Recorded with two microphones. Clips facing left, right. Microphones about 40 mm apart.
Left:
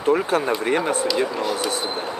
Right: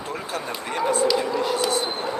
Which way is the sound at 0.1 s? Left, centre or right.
Left.